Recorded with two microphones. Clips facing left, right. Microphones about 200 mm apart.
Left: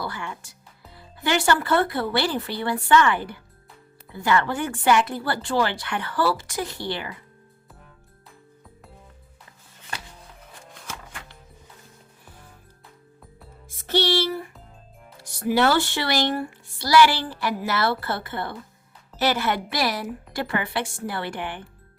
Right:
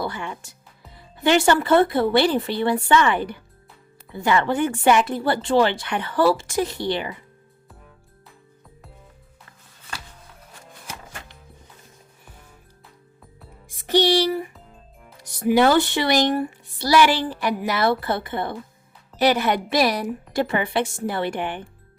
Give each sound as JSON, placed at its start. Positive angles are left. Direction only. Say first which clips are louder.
{"t": 0.0, "sound": "a woman's voice", "louder": "right 4 dB", "side_deg": -20}
{"t": 10.8, "sound": "music", "louder": "right 1 dB", "side_deg": -20}
{"t": 13.7, "sound": "music", "louder": "right 4 dB", "side_deg": -15}
{"t": 15.2, "sound": "a woman's voice", "louder": "right 4 dB", "side_deg": -20}